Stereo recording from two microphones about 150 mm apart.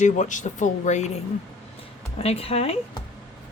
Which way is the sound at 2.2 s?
40° left (ahead or behind).